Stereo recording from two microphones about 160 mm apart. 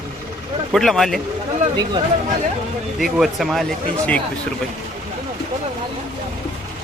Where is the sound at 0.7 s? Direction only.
Centre (ahead or behind).